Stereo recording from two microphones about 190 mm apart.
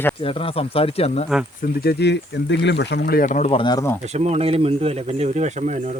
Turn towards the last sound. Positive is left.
turn(degrees=-40)  # may be behind; listen again after turning